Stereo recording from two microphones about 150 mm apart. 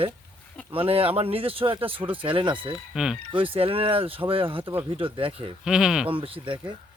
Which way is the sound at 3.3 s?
35° right (ahead or behind).